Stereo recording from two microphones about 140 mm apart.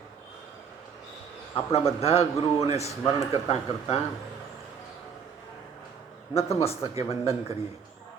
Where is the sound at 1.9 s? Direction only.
45° left (ahead or behind).